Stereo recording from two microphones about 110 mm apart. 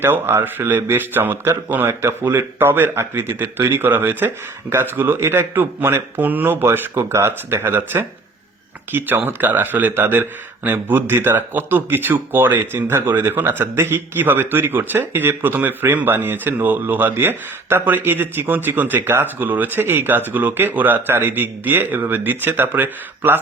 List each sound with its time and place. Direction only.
0.0 s speech: 20° right (ahead or behind)